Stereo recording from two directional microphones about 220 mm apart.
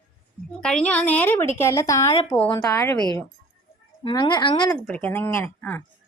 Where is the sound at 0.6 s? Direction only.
5° left (ahead or behind).